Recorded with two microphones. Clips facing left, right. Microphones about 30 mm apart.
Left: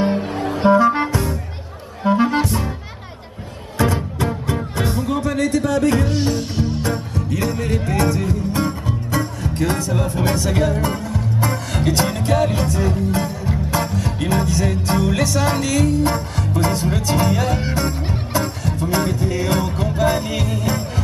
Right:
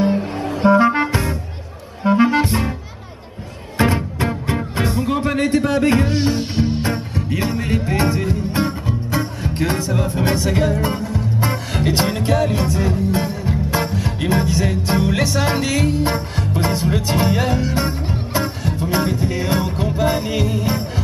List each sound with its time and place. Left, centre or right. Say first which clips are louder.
0.7 s music: even; right
2.4 s music: right 2 dB; right
3.7 s music: right 2 dB; right
5.2 s music: right 1 dB; right
9.9 s vehicle: right 1 dB; centre
10.2 s music: right 1 dB; centre
12.4 s music: left 2 dB; centre
12.6 s music: right 1 dB; centre
17.0 s speech: even; centre
18.3 s music: even; centre